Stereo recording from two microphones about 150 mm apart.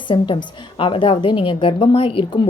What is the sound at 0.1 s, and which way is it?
Speech, 30° left (ahead or behind).